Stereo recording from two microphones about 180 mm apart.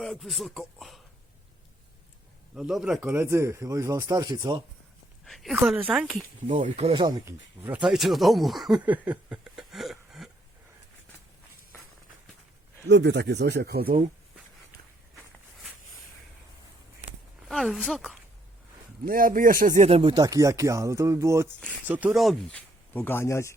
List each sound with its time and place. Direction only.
0.0 s speech: centre (ahead or behind)
2.6 s speech: centre (ahead or behind); by 4.6 s 25° right (ahead or behind)
5.2 s speech: centre (ahead or behind)
6.5 s speech: 35° right (ahead or behind)
7.3 s speech: 10° right (ahead or behind)
12.9 s speech: 70° right (ahead or behind)
17.5 s speech: centre (ahead or behind)
19.0 s speech: 50° right (ahead or behind); by 20.2 s 30° right (ahead or behind)
20.2 s speech: 20° right (ahead or behind); by 22.6 s centre (ahead or behind)
22.9 s speech: 10° left (ahead or behind)